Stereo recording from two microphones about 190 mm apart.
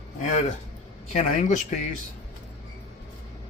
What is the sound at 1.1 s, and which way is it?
Speech, 40° left (ahead or behind).